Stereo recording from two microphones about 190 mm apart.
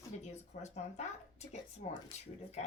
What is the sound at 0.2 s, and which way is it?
Speech, 35° left (ahead or behind).